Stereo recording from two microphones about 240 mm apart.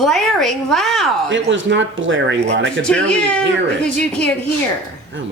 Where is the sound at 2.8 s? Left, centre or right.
Centre.